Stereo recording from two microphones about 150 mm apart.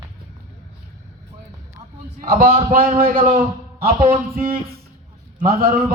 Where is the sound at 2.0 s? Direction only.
75° right (ahead or behind).